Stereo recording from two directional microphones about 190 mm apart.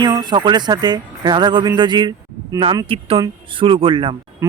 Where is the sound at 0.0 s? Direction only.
20° right (ahead or behind).